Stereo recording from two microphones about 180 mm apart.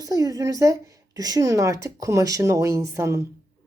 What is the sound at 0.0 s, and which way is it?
Speech, 20° right (ahead or behind).